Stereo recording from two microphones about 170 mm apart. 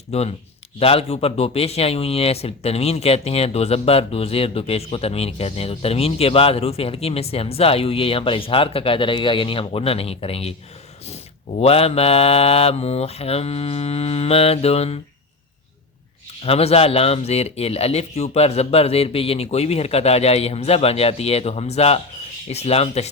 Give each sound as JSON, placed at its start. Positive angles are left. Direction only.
{"t": 0.1, "sound": "a man's voice", "side_deg": 40}
{"t": 16.4, "sound": "a man's voice", "side_deg": 35}